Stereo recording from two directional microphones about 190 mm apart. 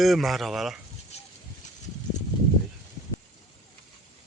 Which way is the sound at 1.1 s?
35° left (ahead or behind).